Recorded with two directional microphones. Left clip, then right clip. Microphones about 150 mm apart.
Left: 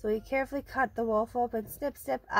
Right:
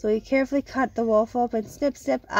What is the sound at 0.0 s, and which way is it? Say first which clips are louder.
Speech: right 7 dB; 40° right (ahead or behind).